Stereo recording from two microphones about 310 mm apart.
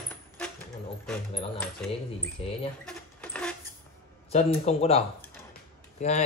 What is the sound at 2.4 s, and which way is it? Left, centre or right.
Speech, centre.